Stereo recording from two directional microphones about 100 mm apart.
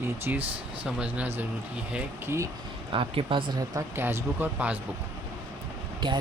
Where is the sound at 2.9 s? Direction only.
60° right (ahead or behind).